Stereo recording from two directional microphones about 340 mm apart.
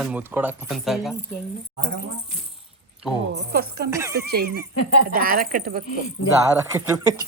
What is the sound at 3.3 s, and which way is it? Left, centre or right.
Speech, right.